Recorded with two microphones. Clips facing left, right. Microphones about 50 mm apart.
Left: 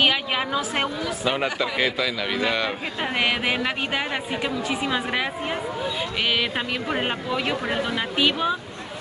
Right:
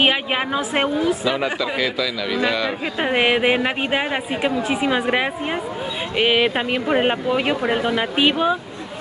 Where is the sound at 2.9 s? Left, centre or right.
Right.